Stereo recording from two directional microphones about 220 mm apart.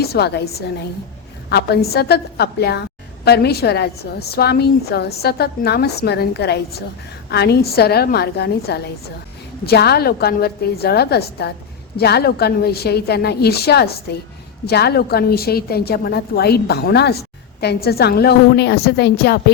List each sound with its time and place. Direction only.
0.0 s a woman's voice: 45° left (ahead or behind)